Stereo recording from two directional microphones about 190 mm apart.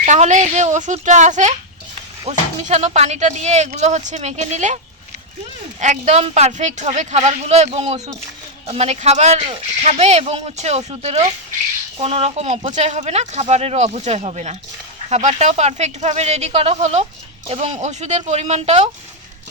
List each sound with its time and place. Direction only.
0.0 s speech: 40° right (ahead or behind)
5.8 s speech: 40° right (ahead or behind)